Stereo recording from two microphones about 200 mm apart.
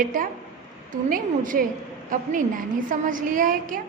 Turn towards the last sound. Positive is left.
turn(degrees=-40)  # may be behind; listen again after turning